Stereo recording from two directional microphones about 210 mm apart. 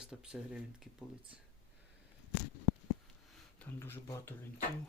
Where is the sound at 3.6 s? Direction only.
10° left (ahead or behind).